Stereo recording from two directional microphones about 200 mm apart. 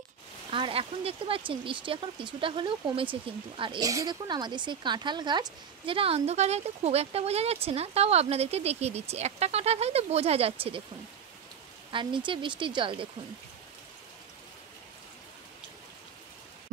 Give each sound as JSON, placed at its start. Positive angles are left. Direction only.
{"t": 0.5, "sound": "speech", "side_deg": -25}
{"t": 11.9, "sound": "speech", "side_deg": -25}